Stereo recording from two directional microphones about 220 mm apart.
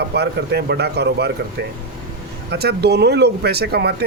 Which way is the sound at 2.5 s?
45° right (ahead or behind).